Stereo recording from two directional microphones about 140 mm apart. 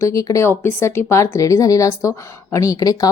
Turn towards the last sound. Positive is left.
turn(degrees=25)  # may be behind; listen again after turning